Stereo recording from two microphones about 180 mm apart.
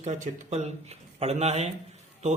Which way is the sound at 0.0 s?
40° right (ahead or behind).